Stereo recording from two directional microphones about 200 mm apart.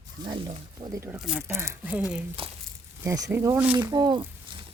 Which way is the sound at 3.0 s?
15° right (ahead or behind).